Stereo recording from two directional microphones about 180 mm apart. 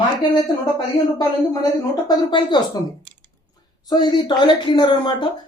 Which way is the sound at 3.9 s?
20° left (ahead or behind).